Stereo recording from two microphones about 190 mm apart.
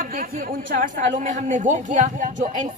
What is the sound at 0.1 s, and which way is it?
A man's voice, 45° right (ahead or behind).